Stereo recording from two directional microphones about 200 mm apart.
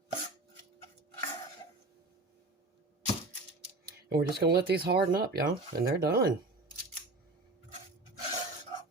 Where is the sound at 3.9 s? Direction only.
55° right (ahead or behind).